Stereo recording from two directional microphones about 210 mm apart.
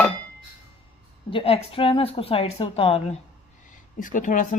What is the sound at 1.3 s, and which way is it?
A woman's voice, 25° left (ahead or behind).